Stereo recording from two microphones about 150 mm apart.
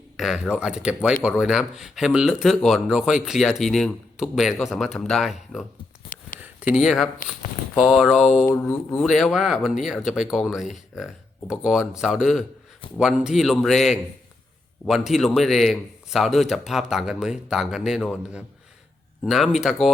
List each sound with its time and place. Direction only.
0.2 s a man's voice: centre (ahead or behind)
8.4 s speech: 15° left (ahead or behind)
9.0 s a man's voice: centre (ahead or behind)